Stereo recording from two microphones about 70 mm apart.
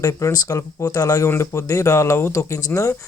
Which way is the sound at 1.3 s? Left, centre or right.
Left.